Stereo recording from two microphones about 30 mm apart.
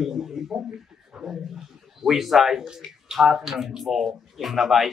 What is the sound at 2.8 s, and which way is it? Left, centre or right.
Bathtub, centre.